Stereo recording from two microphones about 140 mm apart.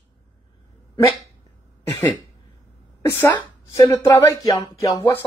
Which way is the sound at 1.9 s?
20° left (ahead or behind).